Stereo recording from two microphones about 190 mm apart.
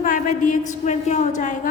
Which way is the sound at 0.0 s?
40° left (ahead or behind).